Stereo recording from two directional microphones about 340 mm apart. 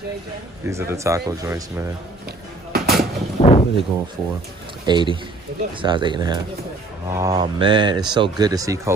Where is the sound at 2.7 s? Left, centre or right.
Right.